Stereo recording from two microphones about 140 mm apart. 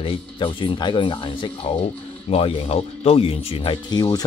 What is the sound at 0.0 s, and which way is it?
Speech, 40° left (ahead or behind).